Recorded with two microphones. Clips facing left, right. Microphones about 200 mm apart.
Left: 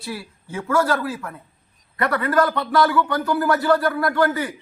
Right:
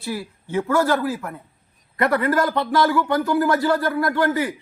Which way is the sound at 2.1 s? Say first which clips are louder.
Left 2 dB; 25° right (ahead or behind).